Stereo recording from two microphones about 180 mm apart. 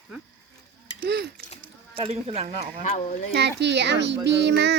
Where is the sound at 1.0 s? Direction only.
65° right (ahead or behind).